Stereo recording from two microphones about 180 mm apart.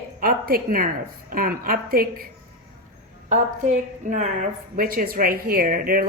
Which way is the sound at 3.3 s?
45° right (ahead or behind).